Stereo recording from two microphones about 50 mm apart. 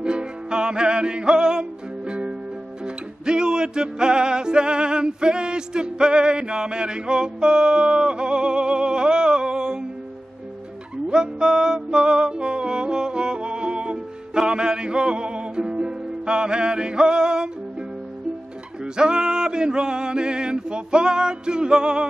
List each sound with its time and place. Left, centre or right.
0.0 s music: centre
11.1 s music: centre
18.9 s a sound: centre